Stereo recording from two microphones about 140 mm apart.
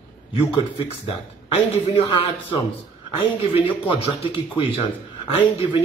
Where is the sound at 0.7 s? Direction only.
40° left (ahead or behind).